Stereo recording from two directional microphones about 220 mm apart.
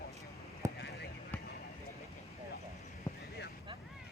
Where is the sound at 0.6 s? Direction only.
15° right (ahead or behind).